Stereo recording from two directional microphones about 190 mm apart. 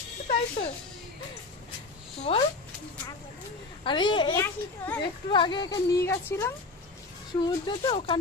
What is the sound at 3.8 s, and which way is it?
Speech, 25° left (ahead or behind).